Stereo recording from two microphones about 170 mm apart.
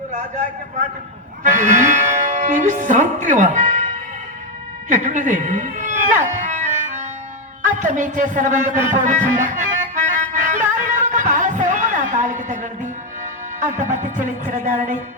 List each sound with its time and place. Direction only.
1.5 s speech: 45° right (ahead or behind)
4.9 s a sound: 45° right (ahead or behind)
7.6 s speech: 45° right (ahead or behind)
8.8 s music: 45° right (ahead or behind)